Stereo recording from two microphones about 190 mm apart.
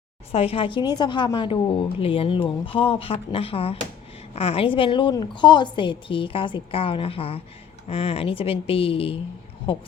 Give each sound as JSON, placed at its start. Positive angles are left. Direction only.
{"t": 0.3, "sound": "a woman's voice", "side_deg": 30}